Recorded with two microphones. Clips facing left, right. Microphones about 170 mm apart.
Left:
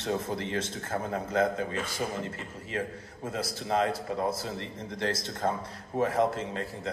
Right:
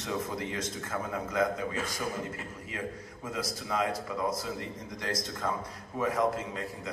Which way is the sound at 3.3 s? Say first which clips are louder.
Left 3 dB; 30° left (ahead or behind).